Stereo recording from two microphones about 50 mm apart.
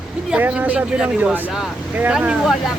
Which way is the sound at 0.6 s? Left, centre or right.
Right.